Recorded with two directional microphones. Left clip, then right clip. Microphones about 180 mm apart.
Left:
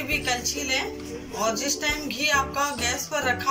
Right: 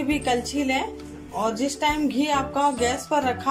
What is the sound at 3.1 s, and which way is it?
Speech, 55° right (ahead or behind).